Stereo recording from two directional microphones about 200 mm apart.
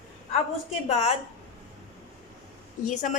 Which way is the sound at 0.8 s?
30° left (ahead or behind).